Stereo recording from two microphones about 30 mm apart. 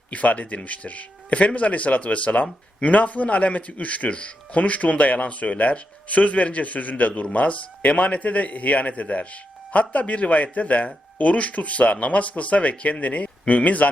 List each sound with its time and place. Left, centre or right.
0.1 s speech: left